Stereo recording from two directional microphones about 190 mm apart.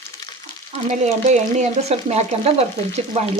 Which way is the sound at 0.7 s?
40° right (ahead or behind).